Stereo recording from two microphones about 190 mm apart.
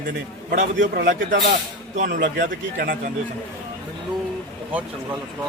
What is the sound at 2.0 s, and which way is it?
Speech, 45° right (ahead or behind).